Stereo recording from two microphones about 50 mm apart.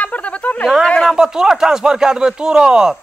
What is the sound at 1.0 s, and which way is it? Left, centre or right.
Speech, centre.